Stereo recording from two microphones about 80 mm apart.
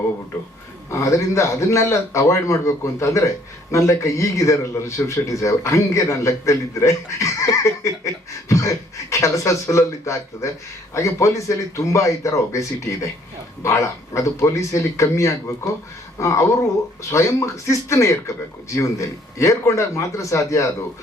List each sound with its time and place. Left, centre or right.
0.9 s a man's voice: left